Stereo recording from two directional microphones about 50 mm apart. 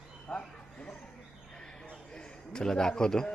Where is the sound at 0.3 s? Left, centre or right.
Left.